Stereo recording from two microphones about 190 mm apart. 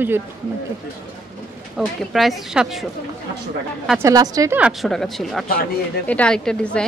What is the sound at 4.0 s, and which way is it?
Speech, 20° right (ahead or behind).